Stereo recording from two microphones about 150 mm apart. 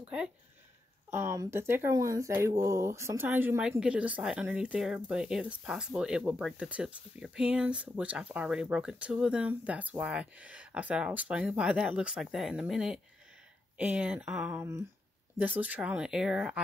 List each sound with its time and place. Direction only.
1.1 s speech: 20° right (ahead or behind); by 14.6 s 5° right (ahead or behind)
14.6 s speech: 20° right (ahead or behind)